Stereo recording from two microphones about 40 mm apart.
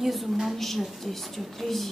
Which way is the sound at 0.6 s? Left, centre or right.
Centre.